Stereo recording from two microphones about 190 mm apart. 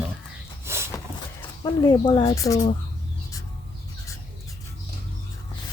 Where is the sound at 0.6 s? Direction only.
15° right (ahead or behind).